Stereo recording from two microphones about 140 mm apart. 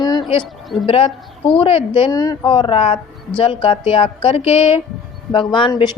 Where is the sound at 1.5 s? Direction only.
35° left (ahead or behind).